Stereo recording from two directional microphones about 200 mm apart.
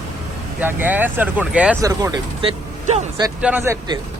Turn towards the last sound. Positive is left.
turn(degrees=-15)  # may be behind; listen again after turning